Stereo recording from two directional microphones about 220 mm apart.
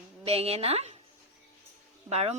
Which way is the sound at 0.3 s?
25° right (ahead or behind).